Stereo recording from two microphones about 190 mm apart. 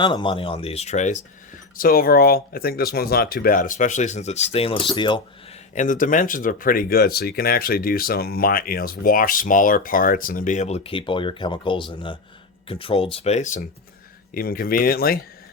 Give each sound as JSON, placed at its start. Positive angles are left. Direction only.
{"t": 0.0, "sound": "speech", "side_deg": 25}
{"t": 1.7, "sound": "speech", "side_deg": 50}
{"t": 5.7, "sound": "speech", "side_deg": 45}
{"t": 14.3, "sound": "speech", "side_deg": 50}